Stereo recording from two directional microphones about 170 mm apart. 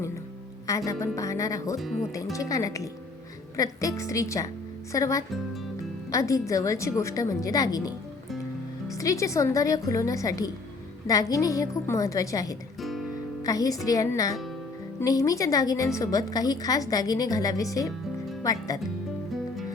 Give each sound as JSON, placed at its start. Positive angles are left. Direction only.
{"t": 0.9, "sound": "a woman's voice", "side_deg": 20}
{"t": 9.0, "sound": "a woman's voice", "side_deg": 20}
{"t": 12.8, "sound": "music", "side_deg": 0}
{"t": 13.4, "sound": "a woman's voice", "side_deg": 20}